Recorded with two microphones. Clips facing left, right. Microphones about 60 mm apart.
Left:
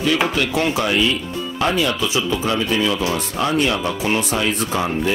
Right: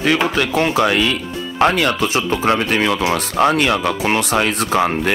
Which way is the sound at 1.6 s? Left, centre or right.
Right.